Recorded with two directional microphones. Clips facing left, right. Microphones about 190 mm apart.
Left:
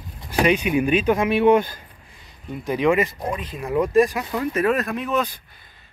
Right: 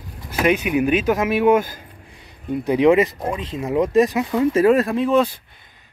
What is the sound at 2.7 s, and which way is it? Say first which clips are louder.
Speech: right 5 dB; 20° right (ahead or behind).